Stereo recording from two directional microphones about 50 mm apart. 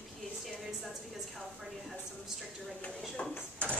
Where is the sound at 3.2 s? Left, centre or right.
Left.